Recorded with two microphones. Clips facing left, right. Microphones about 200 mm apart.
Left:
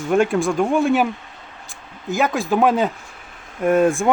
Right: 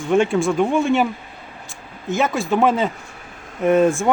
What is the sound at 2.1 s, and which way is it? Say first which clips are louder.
Speech: even; centre (ahead or behind).